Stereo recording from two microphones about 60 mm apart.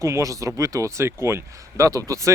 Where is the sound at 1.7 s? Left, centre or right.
Right.